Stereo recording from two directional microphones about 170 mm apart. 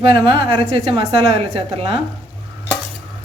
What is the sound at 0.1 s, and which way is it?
A woman's voice, 35° right (ahead or behind).